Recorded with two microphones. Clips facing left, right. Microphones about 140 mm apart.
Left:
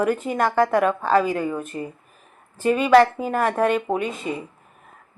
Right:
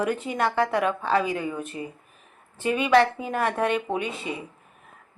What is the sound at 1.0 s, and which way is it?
Speech, 45° left (ahead or behind).